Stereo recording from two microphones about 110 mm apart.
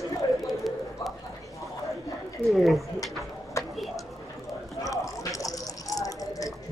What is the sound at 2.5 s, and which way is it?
Speech, centre (ahead or behind).